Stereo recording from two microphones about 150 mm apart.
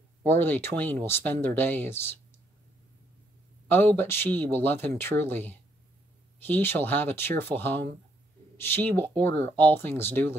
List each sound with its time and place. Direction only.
0.2 s speech: 15° left (ahead or behind)
3.6 s speech: 15° left (ahead or behind)